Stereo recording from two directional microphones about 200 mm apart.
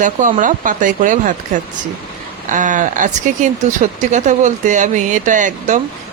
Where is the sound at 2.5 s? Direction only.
40° right (ahead or behind).